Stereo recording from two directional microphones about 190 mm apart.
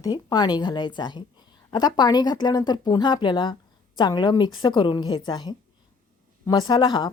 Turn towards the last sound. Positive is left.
turn(degrees=25)  # may be behind; listen again after turning